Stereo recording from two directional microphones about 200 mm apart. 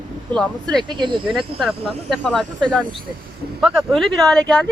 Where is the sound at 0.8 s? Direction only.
25° right (ahead or behind).